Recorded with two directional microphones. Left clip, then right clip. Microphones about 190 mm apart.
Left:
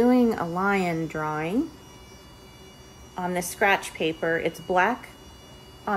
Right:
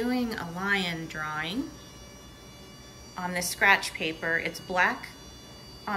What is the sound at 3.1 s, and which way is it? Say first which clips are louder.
A woman's voice: left 3 dB; 25° left (ahead or behind).